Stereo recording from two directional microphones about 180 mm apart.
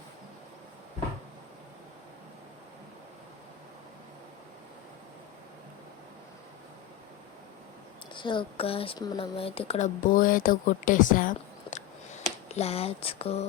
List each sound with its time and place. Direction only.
8.1 s speech: 25° left (ahead or behind); by 11.8 s 45° left (ahead or behind)
12.5 s speech: 35° left (ahead or behind)